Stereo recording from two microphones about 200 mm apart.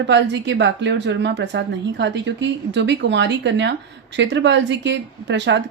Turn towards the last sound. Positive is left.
turn(degrees=-60)  # may be behind; listen again after turning